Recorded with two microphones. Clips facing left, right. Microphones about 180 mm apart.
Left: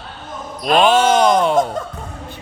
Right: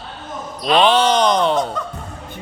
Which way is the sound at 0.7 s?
50° left (ahead or behind).